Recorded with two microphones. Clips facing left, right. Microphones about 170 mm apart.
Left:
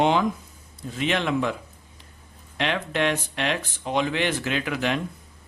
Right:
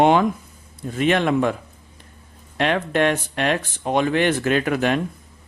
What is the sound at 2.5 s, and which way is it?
A man's voice, 50° right (ahead or behind).